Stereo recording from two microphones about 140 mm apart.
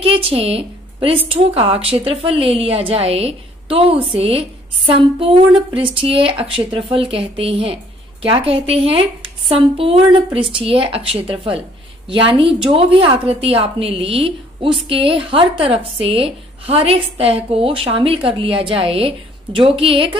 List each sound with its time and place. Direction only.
0.0 s a woman's voice: 40° right (ahead or behind)